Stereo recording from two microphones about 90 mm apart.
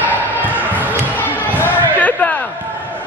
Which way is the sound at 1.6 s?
15° left (ahead or behind).